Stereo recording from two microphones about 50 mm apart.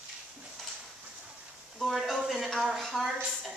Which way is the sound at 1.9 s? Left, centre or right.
Centre.